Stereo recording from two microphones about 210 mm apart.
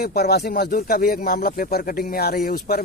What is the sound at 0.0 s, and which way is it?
Speech, 50° left (ahead or behind).